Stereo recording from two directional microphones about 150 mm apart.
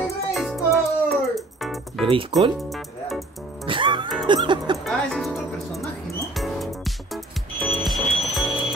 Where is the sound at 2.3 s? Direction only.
Centre (ahead or behind).